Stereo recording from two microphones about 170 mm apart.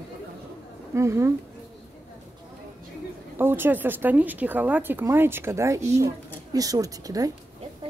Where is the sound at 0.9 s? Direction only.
15° right (ahead or behind).